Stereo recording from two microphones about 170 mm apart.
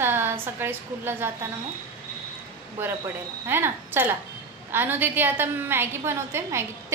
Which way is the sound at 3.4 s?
15° right (ahead or behind).